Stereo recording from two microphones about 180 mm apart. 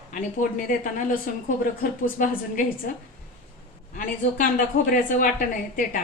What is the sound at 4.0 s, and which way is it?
A woman's voice, 50° left (ahead or behind).